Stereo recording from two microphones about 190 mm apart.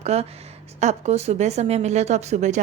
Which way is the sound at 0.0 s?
35° right (ahead or behind).